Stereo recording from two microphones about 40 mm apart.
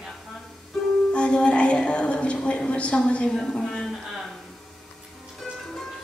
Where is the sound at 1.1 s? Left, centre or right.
Left.